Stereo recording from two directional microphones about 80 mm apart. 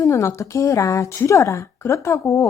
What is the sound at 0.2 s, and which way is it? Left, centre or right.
A woman's voice, left.